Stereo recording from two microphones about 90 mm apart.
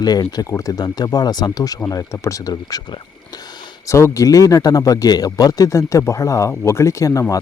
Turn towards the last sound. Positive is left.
turn(degrees=35)  # may be behind; listen again after turning